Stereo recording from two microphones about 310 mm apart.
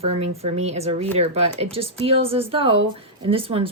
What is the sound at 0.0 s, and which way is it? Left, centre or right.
Speech, centre.